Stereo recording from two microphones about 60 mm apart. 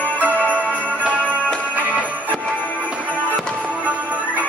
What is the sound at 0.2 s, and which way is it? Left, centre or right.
Music, right.